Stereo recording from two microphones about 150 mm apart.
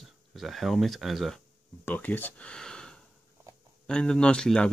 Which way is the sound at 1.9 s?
10° left (ahead or behind).